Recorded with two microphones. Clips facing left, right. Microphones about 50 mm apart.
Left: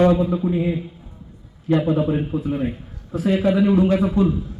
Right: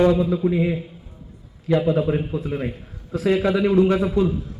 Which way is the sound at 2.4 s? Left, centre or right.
Right.